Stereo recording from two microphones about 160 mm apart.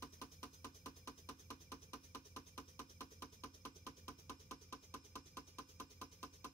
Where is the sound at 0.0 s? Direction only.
20° left (ahead or behind).